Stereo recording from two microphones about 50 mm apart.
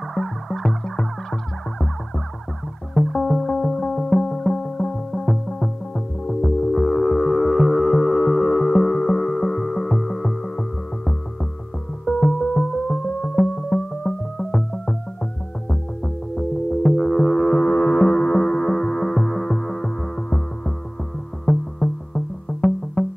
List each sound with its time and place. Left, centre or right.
0.1 s music: centre